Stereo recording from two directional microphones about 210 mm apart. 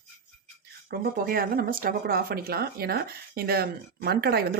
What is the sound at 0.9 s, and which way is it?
Speech, 45° right (ahead or behind).